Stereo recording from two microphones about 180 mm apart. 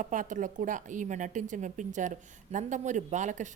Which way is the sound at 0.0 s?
45° right (ahead or behind).